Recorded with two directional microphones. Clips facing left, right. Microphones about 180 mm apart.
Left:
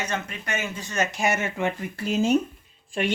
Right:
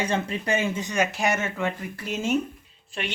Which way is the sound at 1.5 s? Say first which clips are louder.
Left 2 dB; 25° left (ahead or behind).